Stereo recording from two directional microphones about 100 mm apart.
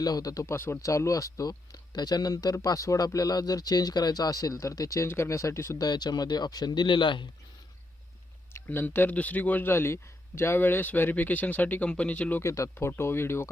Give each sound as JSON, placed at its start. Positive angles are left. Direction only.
{"t": 0.0, "sound": "speech", "side_deg": 40}
{"t": 5.8, "sound": "speech", "side_deg": 45}
{"t": 8.5, "sound": "speech", "side_deg": 20}
{"t": 12.4, "sound": "speech", "side_deg": 30}